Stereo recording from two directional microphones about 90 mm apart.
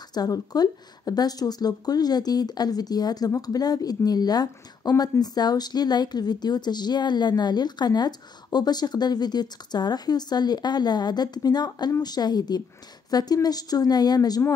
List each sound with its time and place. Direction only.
0.1 s speech: 45° left (ahead or behind)